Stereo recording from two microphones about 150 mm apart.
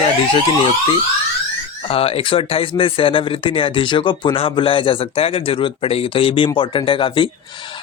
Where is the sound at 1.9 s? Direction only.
40° left (ahead or behind).